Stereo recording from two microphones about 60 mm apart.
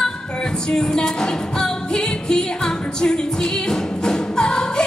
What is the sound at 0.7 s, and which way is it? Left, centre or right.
Music, centre.